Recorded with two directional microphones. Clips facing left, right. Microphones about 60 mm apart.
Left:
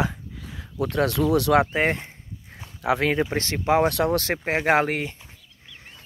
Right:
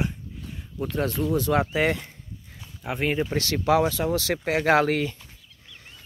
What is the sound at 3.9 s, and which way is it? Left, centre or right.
Speech, left.